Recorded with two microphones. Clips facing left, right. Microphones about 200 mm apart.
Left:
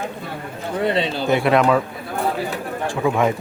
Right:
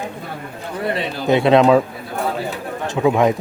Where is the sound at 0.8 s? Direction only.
25° left (ahead or behind).